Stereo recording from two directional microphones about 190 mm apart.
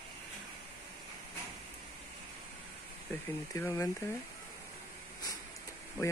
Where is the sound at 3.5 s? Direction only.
15° left (ahead or behind).